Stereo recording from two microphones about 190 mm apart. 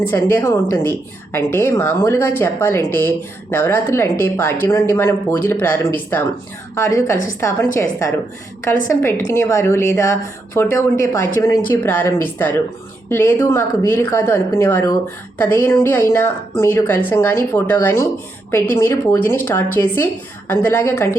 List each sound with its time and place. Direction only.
0.0 s a woman's voice: 10° left (ahead or behind)